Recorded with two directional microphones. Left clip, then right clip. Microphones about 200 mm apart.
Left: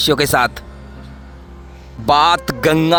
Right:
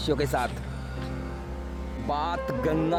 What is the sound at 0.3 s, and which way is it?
Speech, 15° left (ahead or behind).